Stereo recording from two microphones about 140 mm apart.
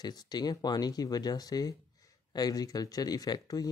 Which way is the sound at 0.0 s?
30° left (ahead or behind).